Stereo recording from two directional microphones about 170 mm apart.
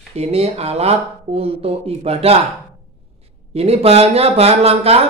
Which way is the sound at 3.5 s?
35° right (ahead or behind).